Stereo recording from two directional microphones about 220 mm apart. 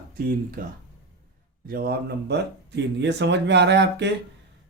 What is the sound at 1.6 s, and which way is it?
Speech, 45° right (ahead or behind).